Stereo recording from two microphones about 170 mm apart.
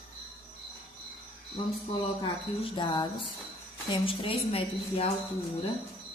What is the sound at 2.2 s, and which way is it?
A woman's voice, 25° left (ahead or behind).